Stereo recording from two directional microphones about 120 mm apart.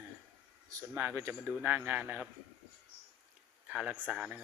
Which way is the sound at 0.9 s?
20° right (ahead or behind).